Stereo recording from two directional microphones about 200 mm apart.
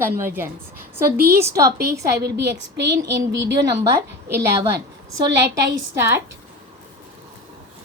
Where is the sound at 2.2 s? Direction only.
55° right (ahead or behind).